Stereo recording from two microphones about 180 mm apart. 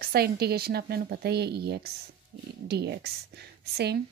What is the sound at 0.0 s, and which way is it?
Speech, 60° right (ahead or behind).